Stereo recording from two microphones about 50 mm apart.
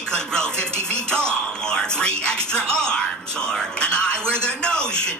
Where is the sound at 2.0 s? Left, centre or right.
Centre.